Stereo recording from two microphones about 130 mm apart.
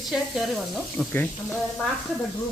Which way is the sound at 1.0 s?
10° right (ahead or behind).